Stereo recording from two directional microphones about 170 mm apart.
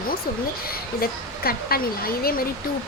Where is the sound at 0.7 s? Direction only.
60° left (ahead or behind).